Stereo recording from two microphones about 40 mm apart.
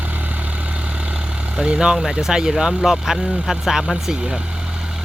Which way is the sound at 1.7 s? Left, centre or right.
Centre.